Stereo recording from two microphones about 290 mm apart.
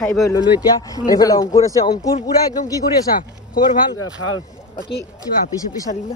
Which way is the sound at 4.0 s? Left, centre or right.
Left.